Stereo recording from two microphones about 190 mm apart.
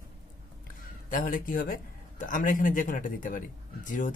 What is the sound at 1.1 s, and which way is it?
Speech, 45° left (ahead or behind).